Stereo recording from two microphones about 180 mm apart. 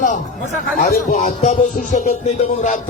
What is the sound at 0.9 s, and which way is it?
Speech, 50° left (ahead or behind).